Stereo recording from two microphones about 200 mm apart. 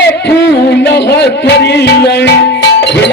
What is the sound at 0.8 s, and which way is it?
Music, 55° left (ahead or behind).